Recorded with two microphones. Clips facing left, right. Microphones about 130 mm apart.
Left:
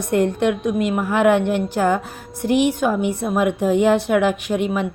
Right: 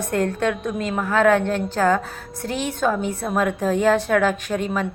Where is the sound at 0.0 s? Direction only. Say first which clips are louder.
Left 3 dB; 15° left (ahead or behind).